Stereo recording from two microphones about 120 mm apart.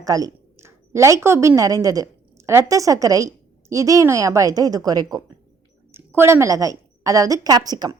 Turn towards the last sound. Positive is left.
turn(degrees=-30)  # may be behind; listen again after turning